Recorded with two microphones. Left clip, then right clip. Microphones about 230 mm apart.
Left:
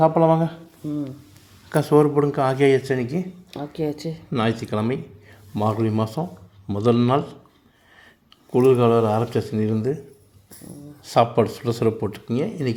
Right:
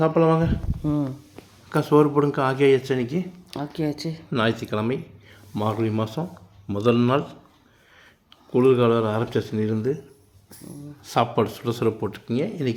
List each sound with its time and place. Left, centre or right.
0.0 s speech: centre
1.7 s speech: centre
3.5 s speech: right
4.3 s speech: centre
8.5 s speech: centre
11.0 s speech: centre